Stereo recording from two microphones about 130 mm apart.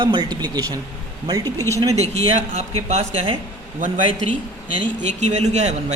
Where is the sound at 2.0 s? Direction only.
55° right (ahead or behind).